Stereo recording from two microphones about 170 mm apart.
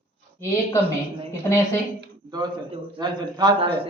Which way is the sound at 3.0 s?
25° right (ahead or behind).